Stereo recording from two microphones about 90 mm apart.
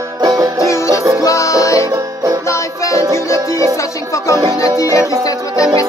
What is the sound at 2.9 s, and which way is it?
Music, 35° left (ahead or behind).